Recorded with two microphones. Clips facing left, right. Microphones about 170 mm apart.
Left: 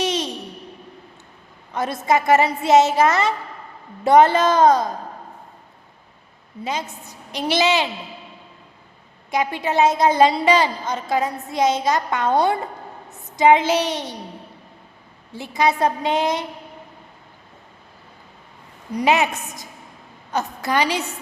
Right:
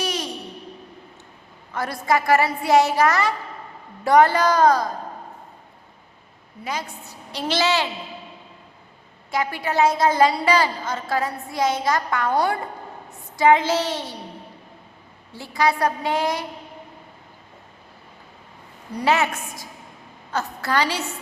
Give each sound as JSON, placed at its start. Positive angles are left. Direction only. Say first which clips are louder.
{"t": 0.0, "sound": "a sound", "louder": "left 4 dB", "side_deg": 20}
{"t": 1.7, "sound": "a woman's voice", "louder": "left 2 dB", "side_deg": 20}
{"t": 6.7, "sound": "a woman's voice", "louder": "left 2 dB", "side_deg": 20}
{"t": 9.3, "sound": "a woman's voice", "louder": "left 2 dB", "side_deg": 20}
{"t": 15.4, "sound": "a woman's voice", "louder": "left 2 dB", "side_deg": 20}
{"t": 18.9, "sound": "a woman's voice", "louder": "left 2 dB", "side_deg": 15}